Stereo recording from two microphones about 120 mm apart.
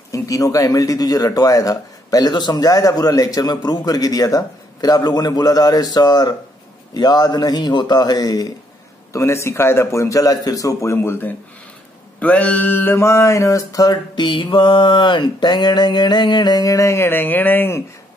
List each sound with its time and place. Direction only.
0.1 s speech: 30° left (ahead or behind)
9.1 s mantra: 25° left (ahead or behind)